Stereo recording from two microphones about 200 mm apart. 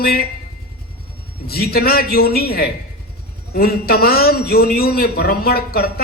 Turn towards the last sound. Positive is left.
turn(degrees=50)  # may be behind; listen again after turning